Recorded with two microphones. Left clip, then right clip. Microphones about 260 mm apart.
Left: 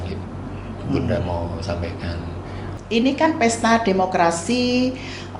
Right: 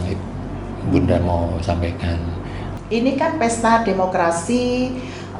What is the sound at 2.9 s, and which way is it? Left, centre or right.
A woman's voice, left.